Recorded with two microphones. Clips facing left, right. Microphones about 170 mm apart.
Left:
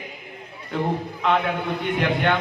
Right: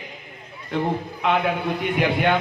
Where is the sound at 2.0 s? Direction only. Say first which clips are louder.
Right 2 dB; 10° right (ahead or behind).